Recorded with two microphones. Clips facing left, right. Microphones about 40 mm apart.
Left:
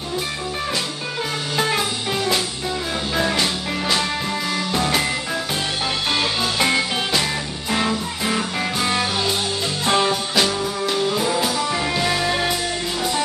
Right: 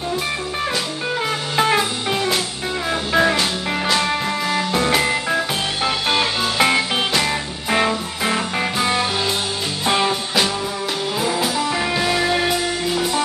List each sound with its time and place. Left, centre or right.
1.6 s music: centre
3.3 s music: centre
4.0 s music: centre